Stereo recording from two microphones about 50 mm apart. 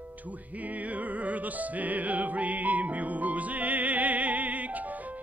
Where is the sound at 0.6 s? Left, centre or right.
Right.